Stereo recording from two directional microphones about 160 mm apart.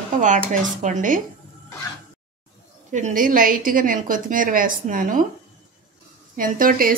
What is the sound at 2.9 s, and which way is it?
Speech, 55° right (ahead or behind).